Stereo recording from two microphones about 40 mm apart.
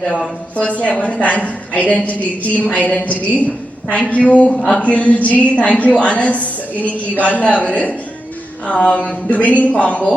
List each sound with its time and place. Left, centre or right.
0.8 s a woman's voice: left
4.5 s a sound: centre
4.8 s a woman's voice: left